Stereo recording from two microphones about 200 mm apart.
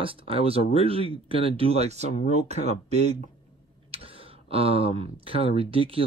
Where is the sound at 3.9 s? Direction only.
30° right (ahead or behind).